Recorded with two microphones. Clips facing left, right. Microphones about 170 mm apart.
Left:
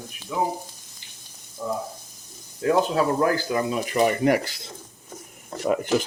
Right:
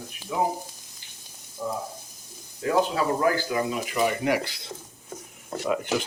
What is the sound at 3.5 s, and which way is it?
Speech, 45° left (ahead or behind).